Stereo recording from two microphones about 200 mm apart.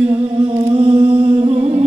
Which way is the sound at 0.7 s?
25° right (ahead or behind).